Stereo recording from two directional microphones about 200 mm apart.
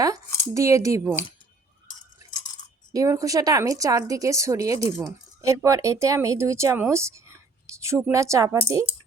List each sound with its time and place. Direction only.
0.5 s speech: 15° right (ahead or behind)
2.9 s speech: 15° right (ahead or behind)